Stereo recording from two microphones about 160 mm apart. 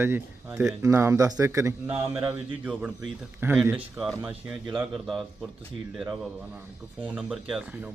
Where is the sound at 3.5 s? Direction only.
5° right (ahead or behind).